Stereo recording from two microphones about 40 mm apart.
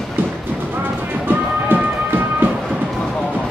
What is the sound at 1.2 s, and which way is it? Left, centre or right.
Music, right.